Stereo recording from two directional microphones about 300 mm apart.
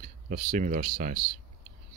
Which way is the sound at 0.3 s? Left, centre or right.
Right.